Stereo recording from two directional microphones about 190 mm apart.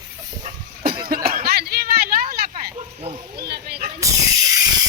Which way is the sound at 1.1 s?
50° right (ahead or behind).